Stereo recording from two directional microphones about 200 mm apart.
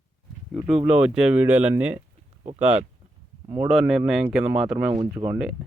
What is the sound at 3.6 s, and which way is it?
Speech, centre (ahead or behind).